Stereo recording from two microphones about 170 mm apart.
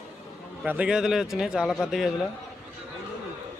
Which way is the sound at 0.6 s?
10° right (ahead or behind).